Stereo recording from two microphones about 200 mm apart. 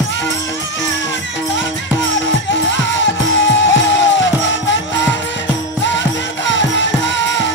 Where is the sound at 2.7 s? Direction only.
65° left (ahead or behind).